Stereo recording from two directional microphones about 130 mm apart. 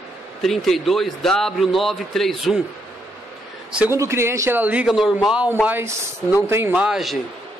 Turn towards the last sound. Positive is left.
turn(degrees=0)  # may be behind; listen again after turning